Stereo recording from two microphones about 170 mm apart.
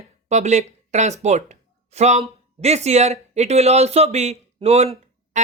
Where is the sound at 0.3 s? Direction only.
45° right (ahead or behind).